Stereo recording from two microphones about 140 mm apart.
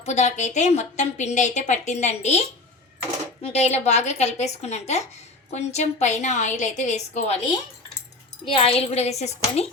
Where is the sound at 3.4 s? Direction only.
50° left (ahead or behind).